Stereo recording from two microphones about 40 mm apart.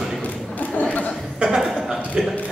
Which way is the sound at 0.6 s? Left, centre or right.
Left.